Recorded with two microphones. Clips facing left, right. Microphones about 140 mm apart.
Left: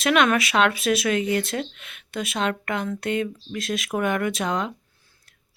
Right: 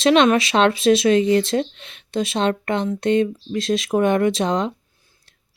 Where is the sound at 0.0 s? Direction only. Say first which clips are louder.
Right 5 dB; 25° right (ahead or behind).